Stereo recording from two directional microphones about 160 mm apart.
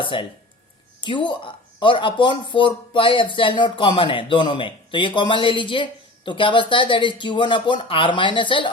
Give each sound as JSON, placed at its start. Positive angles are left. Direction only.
{"t": 0.0, "sound": "speech", "side_deg": 30}